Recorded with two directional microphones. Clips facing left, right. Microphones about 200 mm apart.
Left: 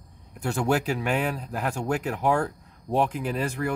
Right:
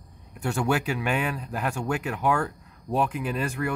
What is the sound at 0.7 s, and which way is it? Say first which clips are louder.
Speech: left 2 dB; 40° left (ahead or behind).